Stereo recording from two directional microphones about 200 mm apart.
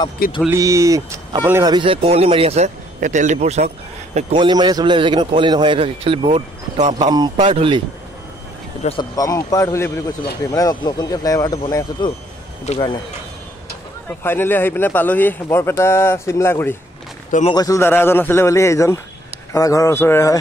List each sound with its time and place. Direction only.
0.5 s speech: 15° right (ahead or behind)
8.8 s a man's voice: 20° left (ahead or behind)
14.2 s a man's voice: 10° left (ahead or behind)
17.3 s speech: 35° left (ahead or behind)
17.6 s a man's voice: 15° left (ahead or behind)